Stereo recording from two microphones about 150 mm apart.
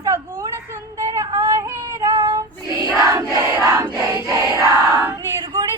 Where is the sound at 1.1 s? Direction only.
25° right (ahead or behind).